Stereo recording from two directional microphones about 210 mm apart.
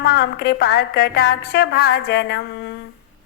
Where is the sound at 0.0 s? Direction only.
50° left (ahead or behind).